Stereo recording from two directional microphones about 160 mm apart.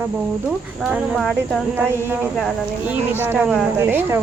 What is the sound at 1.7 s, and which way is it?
Speech, 15° right (ahead or behind).